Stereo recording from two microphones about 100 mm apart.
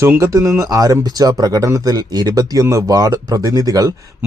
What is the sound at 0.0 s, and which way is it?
Speech, 30° right (ahead or behind).